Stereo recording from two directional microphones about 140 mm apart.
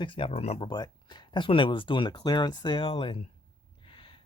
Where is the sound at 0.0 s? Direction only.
40° left (ahead or behind).